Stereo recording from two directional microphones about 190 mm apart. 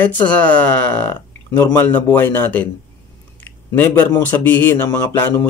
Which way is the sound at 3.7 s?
10° left (ahead or behind).